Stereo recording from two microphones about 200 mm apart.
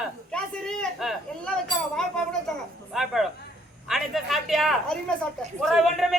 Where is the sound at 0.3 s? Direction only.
5° left (ahead or behind).